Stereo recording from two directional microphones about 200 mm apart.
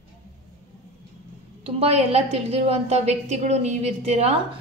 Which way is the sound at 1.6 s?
30° right (ahead or behind).